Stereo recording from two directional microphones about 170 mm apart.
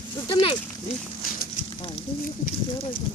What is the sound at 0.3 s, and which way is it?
Speech, 30° left (ahead or behind).